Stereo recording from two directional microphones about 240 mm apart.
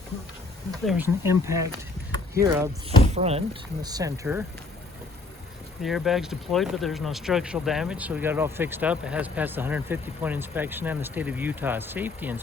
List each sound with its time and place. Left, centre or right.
0.7 s speech: centre
3.1 s speech: right
3.8 s speech: centre
5.8 s speech: centre